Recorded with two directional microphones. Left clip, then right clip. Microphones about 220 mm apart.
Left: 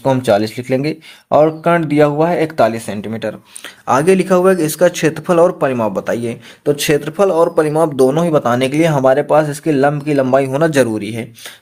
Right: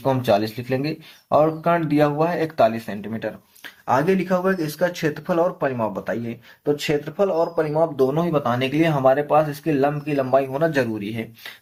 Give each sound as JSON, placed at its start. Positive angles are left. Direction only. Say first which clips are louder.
{"t": 0.0, "sound": "speech", "louder": "left 6 dB", "side_deg": 40}